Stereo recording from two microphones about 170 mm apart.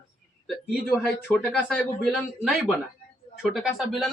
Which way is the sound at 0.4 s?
5° left (ahead or behind).